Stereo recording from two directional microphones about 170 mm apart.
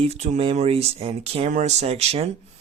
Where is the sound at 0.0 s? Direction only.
40° right (ahead or behind).